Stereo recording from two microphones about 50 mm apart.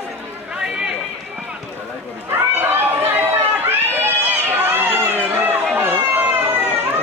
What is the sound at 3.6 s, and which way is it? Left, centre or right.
Run, right.